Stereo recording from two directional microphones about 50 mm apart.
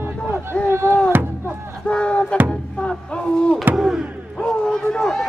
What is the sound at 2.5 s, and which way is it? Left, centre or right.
Music, centre.